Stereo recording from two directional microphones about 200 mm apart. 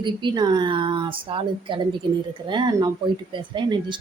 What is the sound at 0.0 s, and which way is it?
Speech, 25° right (ahead or behind).